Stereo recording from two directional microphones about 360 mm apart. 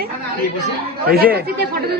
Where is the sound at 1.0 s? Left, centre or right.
Right.